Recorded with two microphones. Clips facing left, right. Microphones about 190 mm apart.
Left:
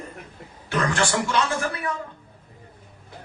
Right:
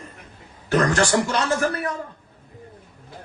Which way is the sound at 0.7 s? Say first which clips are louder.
Right 5 dB; 40° right (ahead or behind).